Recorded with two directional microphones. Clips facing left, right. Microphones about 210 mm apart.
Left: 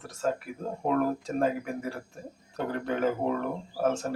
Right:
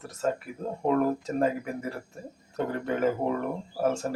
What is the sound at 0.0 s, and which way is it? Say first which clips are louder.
Speech: right 1 dB; 5° right (ahead or behind).